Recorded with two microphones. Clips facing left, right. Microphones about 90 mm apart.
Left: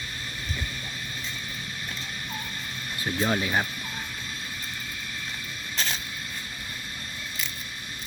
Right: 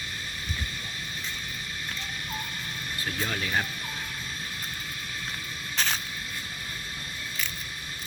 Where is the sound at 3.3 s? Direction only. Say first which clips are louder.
Left 4 dB; 20° left (ahead or behind).